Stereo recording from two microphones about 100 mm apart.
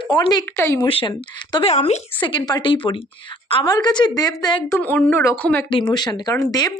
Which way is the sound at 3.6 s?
45° left (ahead or behind).